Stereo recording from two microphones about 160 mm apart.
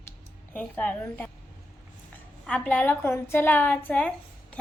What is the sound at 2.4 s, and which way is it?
A woman's voice, 10° left (ahead or behind).